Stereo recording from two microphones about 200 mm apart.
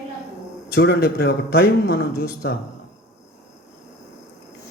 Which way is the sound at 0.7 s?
55° left (ahead or behind).